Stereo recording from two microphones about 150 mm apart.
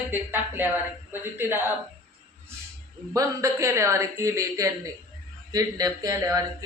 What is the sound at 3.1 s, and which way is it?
Speech, 20° right (ahead or behind).